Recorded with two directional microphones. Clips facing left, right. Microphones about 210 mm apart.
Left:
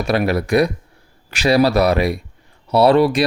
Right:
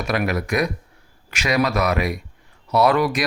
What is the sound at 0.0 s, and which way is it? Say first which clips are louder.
Speech: left 5 dB; 30° left (ahead or behind).